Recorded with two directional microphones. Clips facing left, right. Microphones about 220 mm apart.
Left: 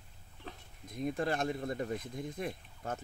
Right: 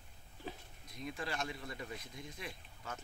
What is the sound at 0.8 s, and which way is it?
Speech, 50° left (ahead or behind).